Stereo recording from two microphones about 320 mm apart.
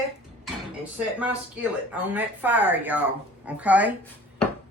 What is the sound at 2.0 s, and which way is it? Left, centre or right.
Speech, centre.